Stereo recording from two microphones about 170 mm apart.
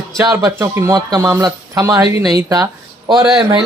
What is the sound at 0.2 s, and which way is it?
Speech, 20° right (ahead or behind).